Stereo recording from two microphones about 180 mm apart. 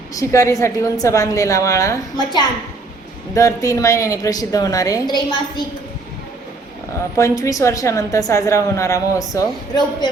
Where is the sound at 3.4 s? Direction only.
15° left (ahead or behind).